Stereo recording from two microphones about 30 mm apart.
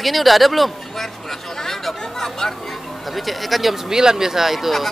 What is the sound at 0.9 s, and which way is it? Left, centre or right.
Speech, centre.